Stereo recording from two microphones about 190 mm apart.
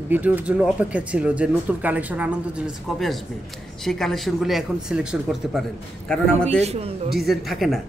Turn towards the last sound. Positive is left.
turn(degrees=0)  # may be behind; listen again after turning